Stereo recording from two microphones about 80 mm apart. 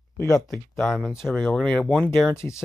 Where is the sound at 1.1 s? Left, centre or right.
Centre.